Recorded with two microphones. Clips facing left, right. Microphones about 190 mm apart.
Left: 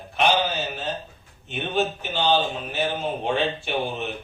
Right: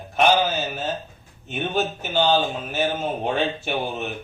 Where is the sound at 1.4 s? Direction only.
40° right (ahead or behind).